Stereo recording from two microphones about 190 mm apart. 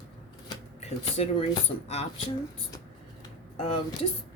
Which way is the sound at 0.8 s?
30° left (ahead or behind).